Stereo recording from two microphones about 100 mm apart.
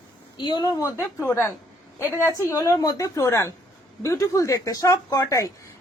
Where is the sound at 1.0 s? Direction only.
25° left (ahead or behind).